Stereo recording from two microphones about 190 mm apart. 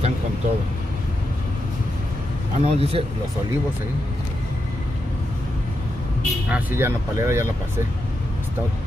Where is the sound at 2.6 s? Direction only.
30° right (ahead or behind).